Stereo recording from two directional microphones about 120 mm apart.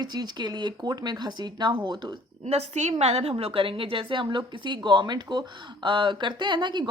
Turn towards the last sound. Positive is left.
turn(degrees=-40)  # may be behind; listen again after turning